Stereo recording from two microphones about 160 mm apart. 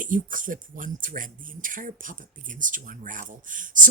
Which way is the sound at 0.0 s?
55° right (ahead or behind).